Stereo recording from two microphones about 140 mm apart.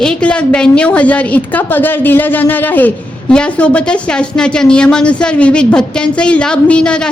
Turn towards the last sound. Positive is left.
turn(degrees=5)  # may be behind; listen again after turning